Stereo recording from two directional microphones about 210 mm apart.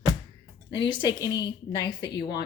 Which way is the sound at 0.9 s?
20° left (ahead or behind).